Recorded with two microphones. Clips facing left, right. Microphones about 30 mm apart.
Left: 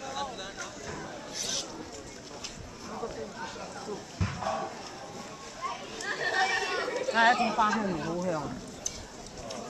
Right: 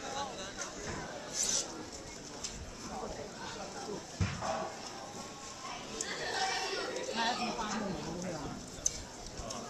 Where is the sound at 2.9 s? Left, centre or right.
Left.